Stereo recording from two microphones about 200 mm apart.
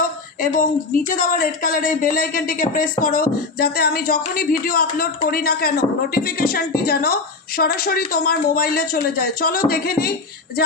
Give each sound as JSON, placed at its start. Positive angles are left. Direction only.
{"t": 0.0, "sound": "a woman's voice", "side_deg": 45}